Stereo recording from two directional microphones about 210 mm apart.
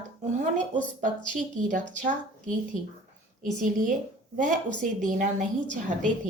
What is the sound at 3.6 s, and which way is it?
Speech, 40° right (ahead or behind).